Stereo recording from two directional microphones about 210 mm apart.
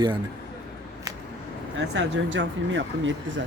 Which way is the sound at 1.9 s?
60° right (ahead or behind).